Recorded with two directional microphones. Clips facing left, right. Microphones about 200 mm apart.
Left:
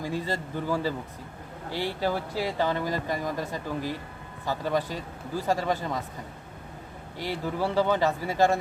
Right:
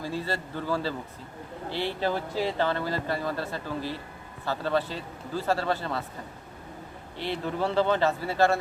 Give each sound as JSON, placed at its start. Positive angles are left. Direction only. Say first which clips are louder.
{"t": 0.0, "sound": "speech", "louder": "left 1 dB", "side_deg": 15}
{"t": 7.2, "sound": "speech", "louder": "even", "side_deg": 10}